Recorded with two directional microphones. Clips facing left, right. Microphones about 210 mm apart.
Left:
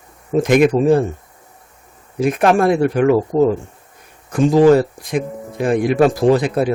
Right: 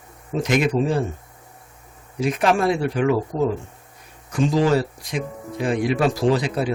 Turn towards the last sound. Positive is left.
turn(degrees=55)  # may be behind; listen again after turning